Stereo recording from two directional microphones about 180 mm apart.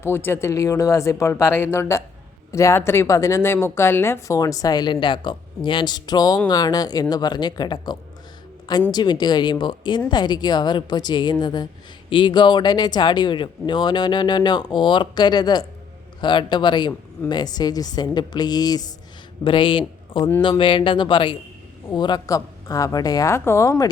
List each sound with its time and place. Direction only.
0.0 s a woman's voice: 10° left (ahead or behind)